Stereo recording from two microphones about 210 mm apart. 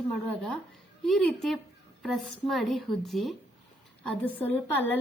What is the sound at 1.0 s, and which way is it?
A woman's voice, centre (ahead or behind).